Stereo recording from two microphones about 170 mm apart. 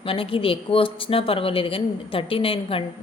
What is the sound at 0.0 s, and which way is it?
A woman's voice, 30° left (ahead or behind).